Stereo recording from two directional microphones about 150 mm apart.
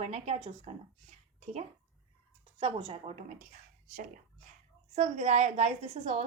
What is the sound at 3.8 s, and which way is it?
A woman's voice, 60° right (ahead or behind).